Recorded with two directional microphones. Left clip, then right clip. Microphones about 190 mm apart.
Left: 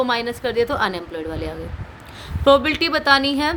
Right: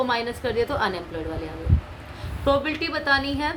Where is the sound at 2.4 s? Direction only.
50° left (ahead or behind).